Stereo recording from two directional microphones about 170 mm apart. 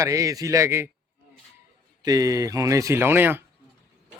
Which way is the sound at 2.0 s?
20° right (ahead or behind).